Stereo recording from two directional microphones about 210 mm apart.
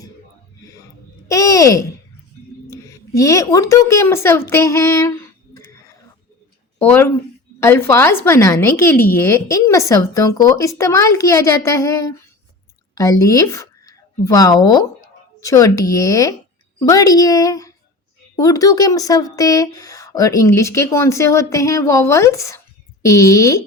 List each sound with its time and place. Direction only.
1.3 s speech: 15° left (ahead or behind)
3.1 s speech: 15° left (ahead or behind)
6.7 s speech: 10° left (ahead or behind)